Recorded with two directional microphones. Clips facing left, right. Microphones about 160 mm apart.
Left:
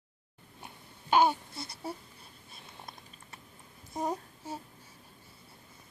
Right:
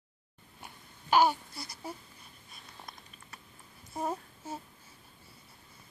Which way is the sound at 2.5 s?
25° left (ahead or behind).